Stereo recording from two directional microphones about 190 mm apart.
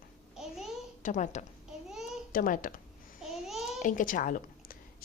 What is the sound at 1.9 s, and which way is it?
Babbling, centre (ahead or behind).